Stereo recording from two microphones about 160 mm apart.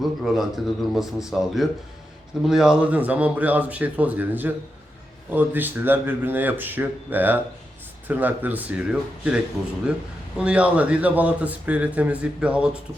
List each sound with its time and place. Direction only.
0.0 s a man's voice: centre (ahead or behind)